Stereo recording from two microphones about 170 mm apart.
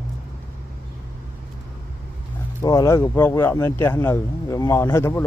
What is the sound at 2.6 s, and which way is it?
Speech, 20° left (ahead or behind).